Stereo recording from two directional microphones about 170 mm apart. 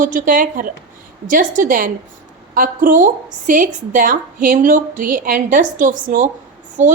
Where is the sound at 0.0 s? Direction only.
50° right (ahead or behind).